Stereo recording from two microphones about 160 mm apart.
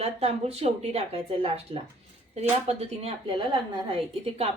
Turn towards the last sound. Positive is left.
turn(degrees=-35)  # may be behind; listen again after turning